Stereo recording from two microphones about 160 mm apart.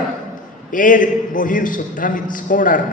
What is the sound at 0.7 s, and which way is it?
A man's voice, 55° left (ahead or behind).